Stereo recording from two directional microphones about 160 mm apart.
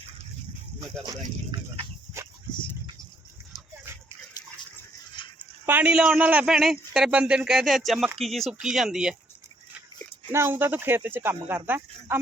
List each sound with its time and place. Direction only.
1.0 s speech: 35° right (ahead or behind)
5.2 s dog: 30° left (ahead or behind)
5.6 s speech: 10° right (ahead or behind)
10.3 s speech: 15° right (ahead or behind)